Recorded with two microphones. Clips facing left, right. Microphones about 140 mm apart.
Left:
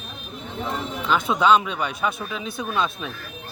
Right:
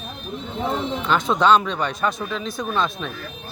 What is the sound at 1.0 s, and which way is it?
A man's voice, 5° left (ahead or behind).